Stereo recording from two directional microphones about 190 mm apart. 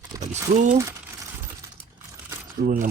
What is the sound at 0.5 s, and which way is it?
Speech, 40° right (ahead or behind).